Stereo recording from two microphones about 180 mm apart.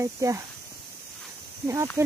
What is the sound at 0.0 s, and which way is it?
Speech, 15° right (ahead or behind).